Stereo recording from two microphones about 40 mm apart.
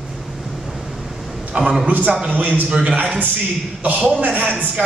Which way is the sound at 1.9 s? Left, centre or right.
Right.